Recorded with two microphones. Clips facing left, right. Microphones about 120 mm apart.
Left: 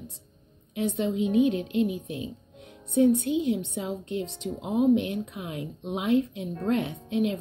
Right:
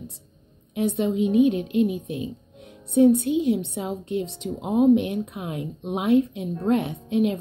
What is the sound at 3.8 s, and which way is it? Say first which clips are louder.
A woman's voice: right 3 dB; 65° right (ahead or behind).